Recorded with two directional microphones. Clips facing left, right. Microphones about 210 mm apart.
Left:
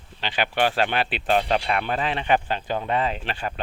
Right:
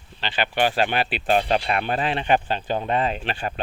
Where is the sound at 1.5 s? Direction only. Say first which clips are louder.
Right 1 dB; 25° right (ahead or behind).